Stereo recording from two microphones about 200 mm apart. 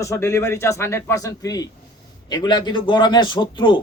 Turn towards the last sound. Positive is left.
turn(degrees=25)  # may be behind; listen again after turning